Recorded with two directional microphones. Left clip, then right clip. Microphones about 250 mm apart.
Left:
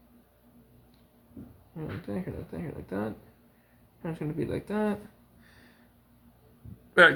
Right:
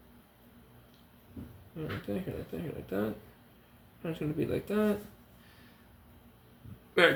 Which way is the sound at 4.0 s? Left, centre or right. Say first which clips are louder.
Even; left.